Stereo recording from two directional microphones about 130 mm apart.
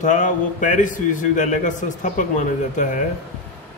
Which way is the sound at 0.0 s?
75° left (ahead or behind).